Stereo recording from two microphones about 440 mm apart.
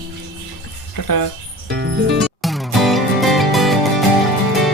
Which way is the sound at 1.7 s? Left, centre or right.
Right.